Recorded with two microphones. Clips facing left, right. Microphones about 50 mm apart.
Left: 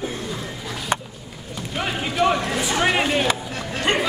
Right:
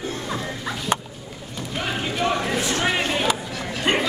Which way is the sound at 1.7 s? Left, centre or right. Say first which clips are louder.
Left 1 dB; centre.